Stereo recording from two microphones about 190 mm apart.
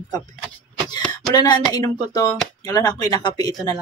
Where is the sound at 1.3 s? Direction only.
20° left (ahead or behind).